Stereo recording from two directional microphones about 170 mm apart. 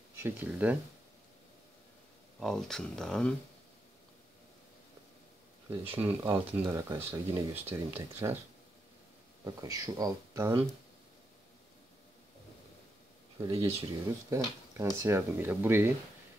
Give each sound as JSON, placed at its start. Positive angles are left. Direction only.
{"t": 0.1, "sound": "speech", "side_deg": -10}
{"t": 2.4, "sound": "speech", "side_deg": 5}
{"t": 5.7, "sound": "speech", "side_deg": -15}
{"t": 9.4, "sound": "speech", "side_deg": -20}
{"t": 13.4, "sound": "speech", "side_deg": -20}